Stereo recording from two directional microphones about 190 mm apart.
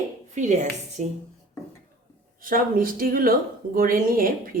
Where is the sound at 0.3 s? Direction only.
40° right (ahead or behind).